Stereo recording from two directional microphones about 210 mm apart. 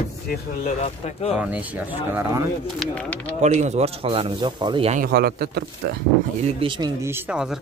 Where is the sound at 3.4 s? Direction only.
30° right (ahead or behind).